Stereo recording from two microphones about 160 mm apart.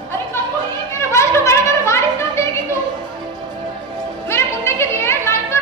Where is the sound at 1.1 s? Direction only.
15° left (ahead or behind).